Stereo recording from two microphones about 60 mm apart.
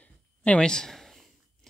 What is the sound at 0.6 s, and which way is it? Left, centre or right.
Speech, centre.